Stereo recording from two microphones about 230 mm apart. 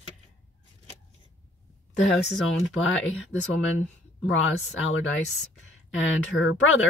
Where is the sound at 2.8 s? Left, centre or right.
Left.